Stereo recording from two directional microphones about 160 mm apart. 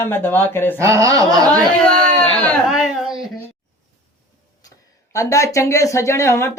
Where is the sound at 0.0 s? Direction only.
15° left (ahead or behind).